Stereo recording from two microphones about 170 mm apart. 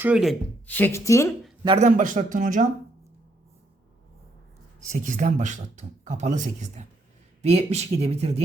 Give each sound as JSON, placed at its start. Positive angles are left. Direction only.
{"t": 0.0, "sound": "speech", "side_deg": -5}
{"t": 0.7, "sound": "speech", "side_deg": 10}
{"t": 1.8, "sound": "speech", "side_deg": -50}
{"t": 4.9, "sound": "speech", "side_deg": -50}